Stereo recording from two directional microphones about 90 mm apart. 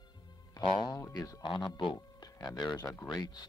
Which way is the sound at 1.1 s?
40° left (ahead or behind).